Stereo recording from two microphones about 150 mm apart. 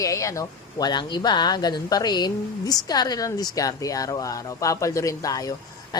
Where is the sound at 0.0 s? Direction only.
20° left (ahead or behind).